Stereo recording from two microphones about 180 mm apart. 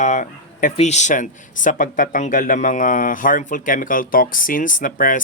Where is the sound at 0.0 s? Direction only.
45° left (ahead or behind).